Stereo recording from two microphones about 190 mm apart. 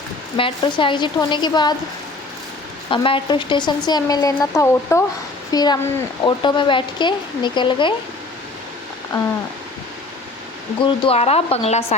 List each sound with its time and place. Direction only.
0.3 s speech: 25° left (ahead or behind)
2.9 s speech: 25° left (ahead or behind)
10.8 s speech: 30° left (ahead or behind)